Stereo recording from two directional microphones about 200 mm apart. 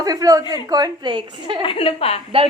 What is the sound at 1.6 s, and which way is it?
Speech, 25° left (ahead or behind).